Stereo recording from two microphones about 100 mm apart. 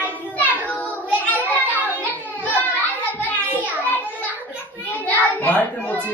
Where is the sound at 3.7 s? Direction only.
15° left (ahead or behind).